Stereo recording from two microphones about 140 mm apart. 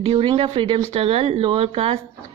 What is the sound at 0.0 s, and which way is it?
A woman's voice, 40° right (ahead or behind).